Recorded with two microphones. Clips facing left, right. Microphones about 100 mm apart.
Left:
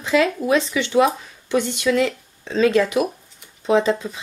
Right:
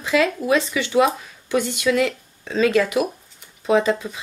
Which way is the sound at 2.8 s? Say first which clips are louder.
Left 1 dB; centre (ahead or behind).